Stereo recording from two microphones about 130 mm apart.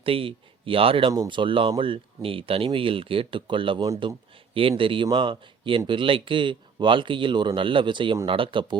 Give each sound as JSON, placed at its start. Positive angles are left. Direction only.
{"t": 0.0, "sound": "speech", "side_deg": -45}
{"t": 1.1, "sound": "speech", "side_deg": -35}